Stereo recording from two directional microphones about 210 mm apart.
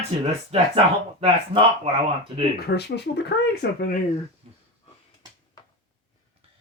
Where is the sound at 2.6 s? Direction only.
50° left (ahead or behind).